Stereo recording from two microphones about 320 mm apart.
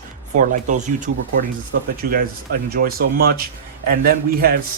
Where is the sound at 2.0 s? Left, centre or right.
Right.